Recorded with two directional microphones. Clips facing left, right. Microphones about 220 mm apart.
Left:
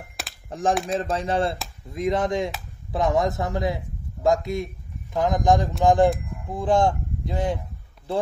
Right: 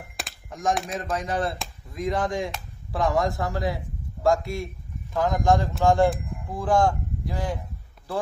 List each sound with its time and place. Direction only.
0.5 s a man's voice: 30° left (ahead or behind)